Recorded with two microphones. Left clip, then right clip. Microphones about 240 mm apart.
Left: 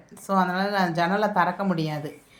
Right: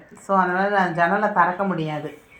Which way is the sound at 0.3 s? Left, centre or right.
Left.